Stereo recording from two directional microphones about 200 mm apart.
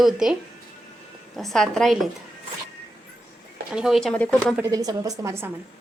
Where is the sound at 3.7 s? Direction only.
Centre (ahead or behind).